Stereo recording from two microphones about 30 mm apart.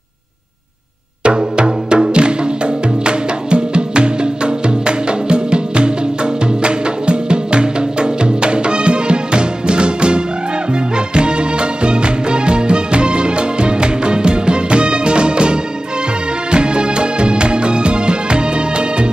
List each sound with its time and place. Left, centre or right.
1.2 s music: right